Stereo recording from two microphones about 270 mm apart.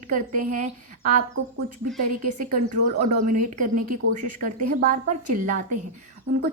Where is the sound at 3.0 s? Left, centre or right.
Right.